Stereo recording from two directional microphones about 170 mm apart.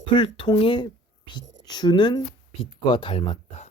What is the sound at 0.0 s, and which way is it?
Speech, 30° left (ahead or behind).